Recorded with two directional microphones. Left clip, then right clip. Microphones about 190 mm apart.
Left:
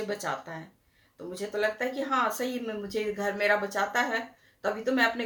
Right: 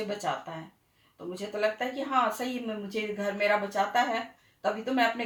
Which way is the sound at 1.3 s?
15° left (ahead or behind).